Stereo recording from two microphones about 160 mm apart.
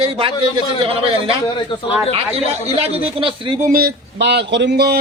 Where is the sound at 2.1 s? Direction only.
35° right (ahead or behind).